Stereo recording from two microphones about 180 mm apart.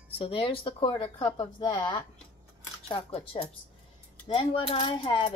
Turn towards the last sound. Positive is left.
turn(degrees=30)  # may be behind; listen again after turning